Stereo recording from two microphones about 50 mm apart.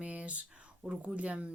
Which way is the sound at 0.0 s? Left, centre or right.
Right.